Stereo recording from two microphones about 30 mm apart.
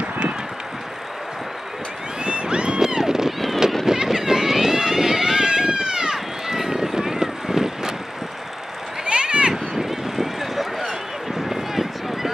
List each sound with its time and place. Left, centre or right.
2.2 s a sound: right
2.8 s cat: centre
3.8 s run: centre
6.1 s vehicle: centre
9.0 s run: right
9.5 s a sound: centre
11.4 s run: centre